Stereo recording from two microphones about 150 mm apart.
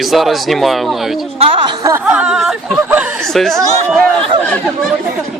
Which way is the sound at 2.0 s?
5° right (ahead or behind).